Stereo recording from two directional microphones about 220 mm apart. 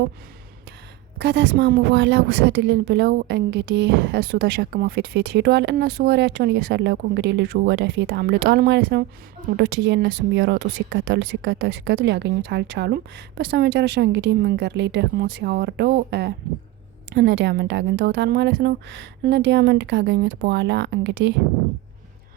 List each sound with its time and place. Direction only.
1.2 s speech: 55° right (ahead or behind)